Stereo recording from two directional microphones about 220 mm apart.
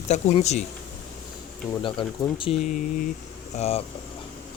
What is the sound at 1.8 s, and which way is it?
Speech, 25° left (ahead or behind).